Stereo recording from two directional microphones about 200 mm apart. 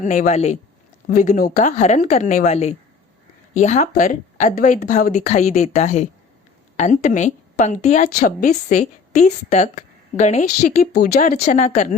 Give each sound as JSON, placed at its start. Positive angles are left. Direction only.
{"t": 0.0, "sound": "a woman's voice", "side_deg": 40}
{"t": 10.9, "sound": "a woman's voice", "side_deg": 50}